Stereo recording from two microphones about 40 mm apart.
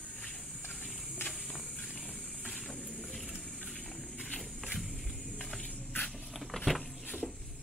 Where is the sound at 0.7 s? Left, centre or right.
Centre.